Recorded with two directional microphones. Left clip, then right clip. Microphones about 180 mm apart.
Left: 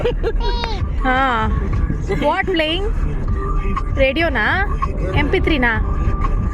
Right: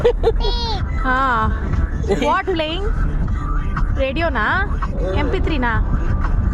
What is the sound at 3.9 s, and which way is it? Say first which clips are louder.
Speech: left 3 dB; 15° left (ahead or behind).